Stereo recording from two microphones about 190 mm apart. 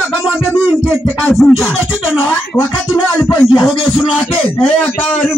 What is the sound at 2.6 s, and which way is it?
Music, 10° left (ahead or behind).